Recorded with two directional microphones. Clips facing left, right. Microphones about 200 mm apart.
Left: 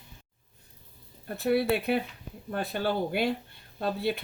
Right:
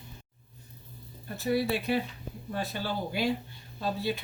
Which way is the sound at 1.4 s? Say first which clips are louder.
Left 3 dB; 60° left (ahead or behind).